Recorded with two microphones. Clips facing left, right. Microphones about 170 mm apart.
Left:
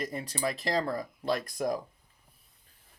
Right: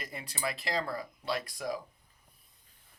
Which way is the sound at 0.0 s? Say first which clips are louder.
Left 5 dB; 40° left (ahead or behind).